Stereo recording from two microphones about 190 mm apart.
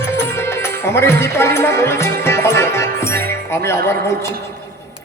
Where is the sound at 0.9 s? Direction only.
15° left (ahead or behind).